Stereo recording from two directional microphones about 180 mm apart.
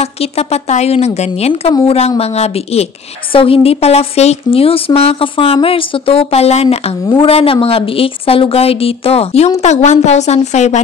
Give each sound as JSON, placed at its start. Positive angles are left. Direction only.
{"t": 0.0, "sound": "a woman's voice", "side_deg": 35}